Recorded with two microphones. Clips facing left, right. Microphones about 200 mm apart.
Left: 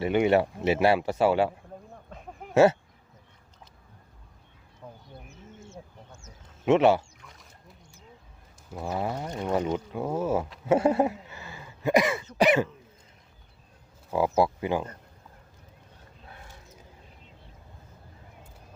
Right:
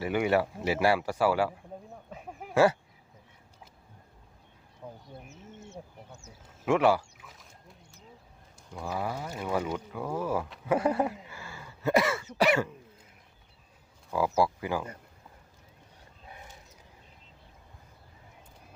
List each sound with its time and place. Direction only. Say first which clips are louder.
0.0 s speech: left 4 dB; 25° left (ahead or behind)
2.0 s a sound: even; 5° right (ahead or behind)
5.0 s bird: right 1 dB; centre (ahead or behind)
6.7 s speech: left 4 dB; 25° left (ahead or behind)
7.2 s a sound: left 1 dB; centre (ahead or behind)
8.8 s speech: left 3 dB; 25° left (ahead or behind)
11.3 s a sound: left 1 dB; 20° left (ahead or behind)
12.4 s speech: left 3 dB; 20° left (ahead or behind)
14.1 s speech: left 3 dB; 25° left (ahead or behind)